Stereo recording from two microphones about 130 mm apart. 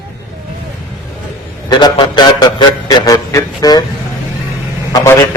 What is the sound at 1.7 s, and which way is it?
A man's voice, 35° left (ahead or behind).